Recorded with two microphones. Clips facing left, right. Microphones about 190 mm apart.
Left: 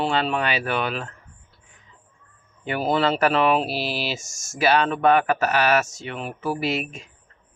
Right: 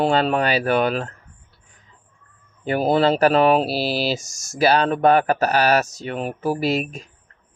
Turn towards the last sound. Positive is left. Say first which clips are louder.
# right 4 dB
turn(degrees=-35)  # may be behind; listen again after turning